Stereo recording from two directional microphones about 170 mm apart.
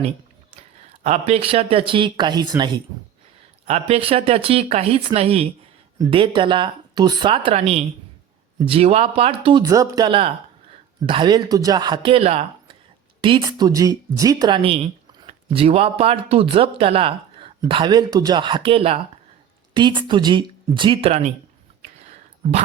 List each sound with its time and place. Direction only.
1.0 s speech: 40° right (ahead or behind)
3.7 s speech: 40° right (ahead or behind)
9.6 s speech: 20° right (ahead or behind)